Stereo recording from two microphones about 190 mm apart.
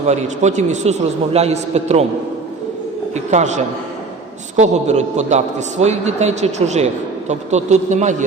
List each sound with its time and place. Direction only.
0.1 s a man's voice: 35° right (ahead or behind)
3.2 s a man's voice: 40° right (ahead or behind)